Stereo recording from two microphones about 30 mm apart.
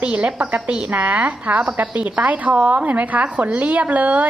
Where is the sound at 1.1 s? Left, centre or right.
Right.